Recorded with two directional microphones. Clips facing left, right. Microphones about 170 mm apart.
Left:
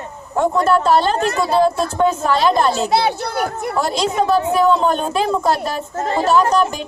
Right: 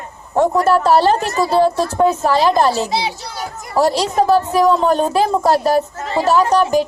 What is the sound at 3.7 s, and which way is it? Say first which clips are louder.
A woman's voice: right 5 dB; 35° right (ahead or behind).